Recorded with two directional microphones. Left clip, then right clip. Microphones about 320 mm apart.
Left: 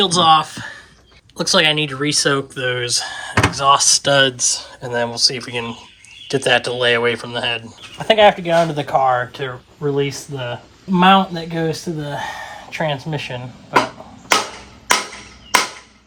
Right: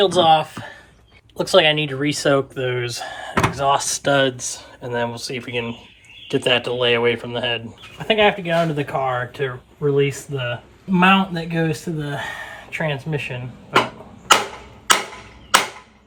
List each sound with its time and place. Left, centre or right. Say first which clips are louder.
0.0 s speech: left 2 dB; centre
7.9 s speech: left 5 dB; left